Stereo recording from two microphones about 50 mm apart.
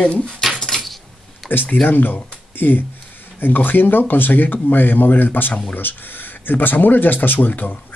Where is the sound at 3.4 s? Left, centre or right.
Left.